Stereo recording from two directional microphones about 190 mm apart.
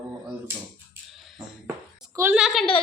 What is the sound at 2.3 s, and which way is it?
Speech, 5° right (ahead or behind).